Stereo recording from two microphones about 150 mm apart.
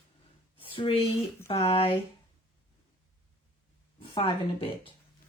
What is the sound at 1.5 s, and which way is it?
Speech, 40° left (ahead or behind).